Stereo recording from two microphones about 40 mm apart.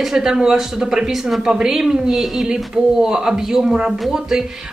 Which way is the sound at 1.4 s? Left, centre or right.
Centre.